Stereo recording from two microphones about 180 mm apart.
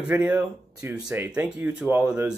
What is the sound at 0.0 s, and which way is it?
Speech, 10° right (ahead or behind).